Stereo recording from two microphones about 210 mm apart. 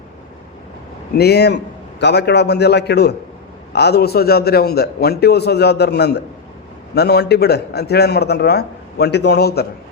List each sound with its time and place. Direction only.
1.1 s a man's voice: 50° left (ahead or behind)